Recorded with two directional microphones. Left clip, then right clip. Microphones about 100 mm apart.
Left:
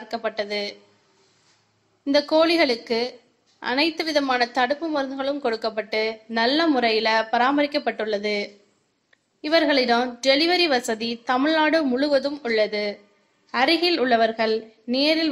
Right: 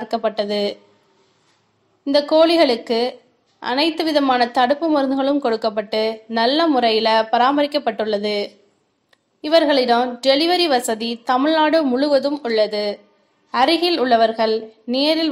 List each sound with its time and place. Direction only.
0.0 s a woman's voice: 30° right (ahead or behind)
2.0 s a woman's voice: 30° right (ahead or behind)